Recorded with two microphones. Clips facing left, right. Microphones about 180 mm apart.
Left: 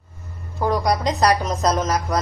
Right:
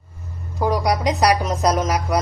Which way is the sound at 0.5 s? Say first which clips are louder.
Even; 15° right (ahead or behind).